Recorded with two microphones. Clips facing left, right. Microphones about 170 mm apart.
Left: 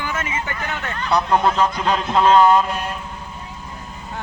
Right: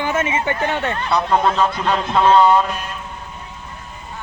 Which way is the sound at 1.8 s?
10° left (ahead or behind).